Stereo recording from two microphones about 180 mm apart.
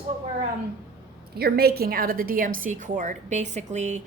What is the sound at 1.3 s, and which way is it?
A woman's voice, 60° right (ahead or behind).